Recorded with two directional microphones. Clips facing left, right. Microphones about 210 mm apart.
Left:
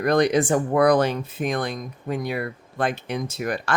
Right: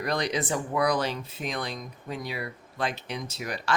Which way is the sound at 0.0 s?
55° left (ahead or behind).